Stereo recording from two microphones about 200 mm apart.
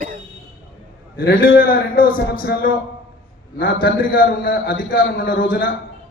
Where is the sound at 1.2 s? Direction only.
45° left (ahead or behind).